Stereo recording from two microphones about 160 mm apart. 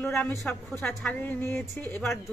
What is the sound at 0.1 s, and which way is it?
A woman's voice, 5° left (ahead or behind).